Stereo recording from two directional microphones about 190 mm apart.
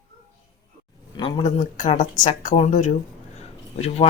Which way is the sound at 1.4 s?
40° left (ahead or behind).